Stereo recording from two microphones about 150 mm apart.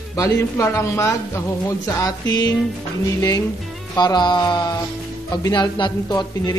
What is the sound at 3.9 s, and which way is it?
A man's voice, 30° left (ahead or behind).